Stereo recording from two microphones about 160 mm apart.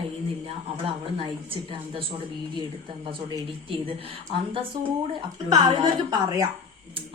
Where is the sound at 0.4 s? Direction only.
35° right (ahead or behind).